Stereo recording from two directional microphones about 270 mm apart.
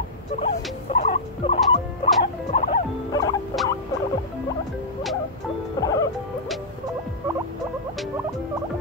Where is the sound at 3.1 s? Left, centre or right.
Centre.